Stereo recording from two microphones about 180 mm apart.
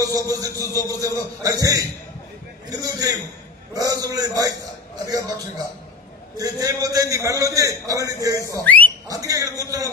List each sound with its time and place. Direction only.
0.0 s a man's voice: 20° right (ahead or behind)
6.3 s a man's voice: 20° right (ahead or behind)
8.6 s a sound: 10° left (ahead or behind)
9.0 s a man's voice: 20° right (ahead or behind)